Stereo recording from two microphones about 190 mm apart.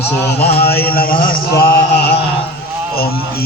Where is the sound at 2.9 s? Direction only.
55° left (ahead or behind).